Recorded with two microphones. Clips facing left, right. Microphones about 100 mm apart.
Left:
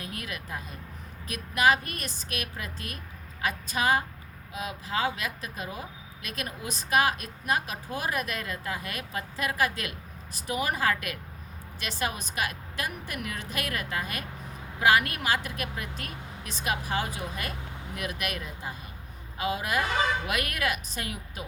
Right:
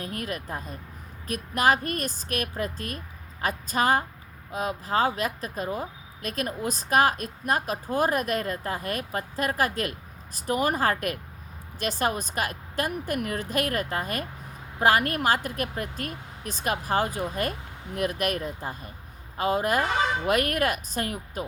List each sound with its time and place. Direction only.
0.0 s speech: 40° right (ahead or behind)